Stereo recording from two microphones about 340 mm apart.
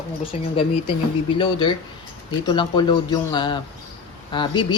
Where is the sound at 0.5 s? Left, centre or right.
Centre.